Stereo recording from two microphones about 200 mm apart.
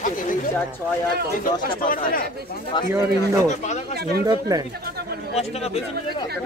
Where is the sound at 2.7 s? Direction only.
20° left (ahead or behind).